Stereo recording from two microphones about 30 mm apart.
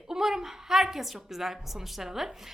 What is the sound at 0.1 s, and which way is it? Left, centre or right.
A woman's voice, centre.